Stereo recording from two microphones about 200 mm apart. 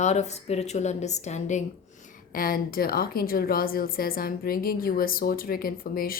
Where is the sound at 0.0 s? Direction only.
35° left (ahead or behind).